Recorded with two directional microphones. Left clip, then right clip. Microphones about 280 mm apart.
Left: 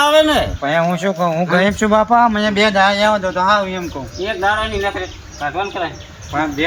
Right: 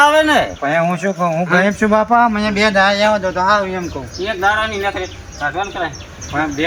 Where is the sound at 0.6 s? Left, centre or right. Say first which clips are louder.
Even; centre.